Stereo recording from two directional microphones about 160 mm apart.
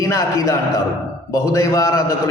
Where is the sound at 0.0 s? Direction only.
20° left (ahead or behind).